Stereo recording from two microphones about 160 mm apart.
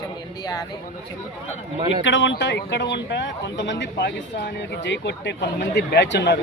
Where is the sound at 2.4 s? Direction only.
90° left.